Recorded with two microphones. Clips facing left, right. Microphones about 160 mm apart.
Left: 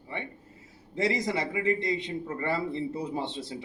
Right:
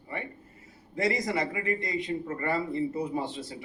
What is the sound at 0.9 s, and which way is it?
A man's voice, 25° left (ahead or behind).